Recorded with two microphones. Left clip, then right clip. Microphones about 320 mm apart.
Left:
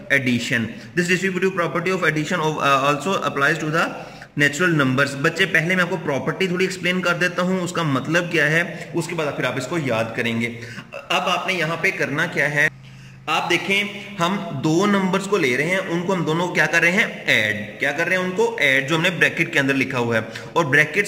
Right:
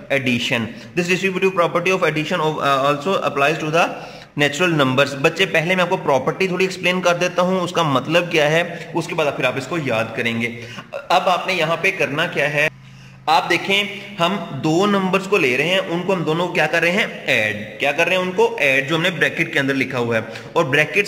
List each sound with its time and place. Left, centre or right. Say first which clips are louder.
0.1 s a man's voice: right 1 dB; centre
11.1 s a man's voice: right 4 dB; centre
14.1 s a man's voice: right 3 dB; centre